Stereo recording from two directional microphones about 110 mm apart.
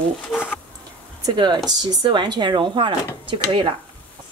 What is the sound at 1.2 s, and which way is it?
Speech, 40° right (ahead or behind).